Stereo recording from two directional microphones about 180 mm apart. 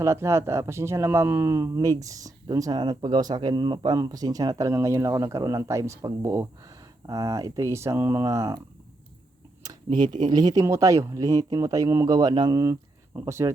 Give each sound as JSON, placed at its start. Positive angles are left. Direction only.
{"t": 0.0, "sound": "speech", "side_deg": -15}
{"t": 9.6, "sound": "a sound", "side_deg": -25}
{"t": 10.2, "sound": "speech", "side_deg": -20}